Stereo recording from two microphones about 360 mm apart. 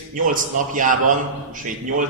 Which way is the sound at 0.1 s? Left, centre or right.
Right.